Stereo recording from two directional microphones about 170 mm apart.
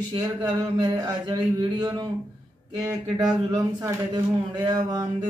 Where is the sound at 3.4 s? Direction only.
20° right (ahead or behind).